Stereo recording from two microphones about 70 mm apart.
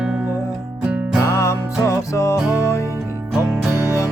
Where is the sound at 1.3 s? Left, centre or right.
Left.